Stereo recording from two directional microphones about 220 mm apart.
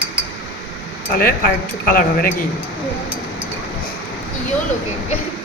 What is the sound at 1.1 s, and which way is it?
Speech, 40° left (ahead or behind).